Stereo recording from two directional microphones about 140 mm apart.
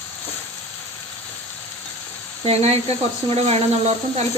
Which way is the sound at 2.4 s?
50° right (ahead or behind).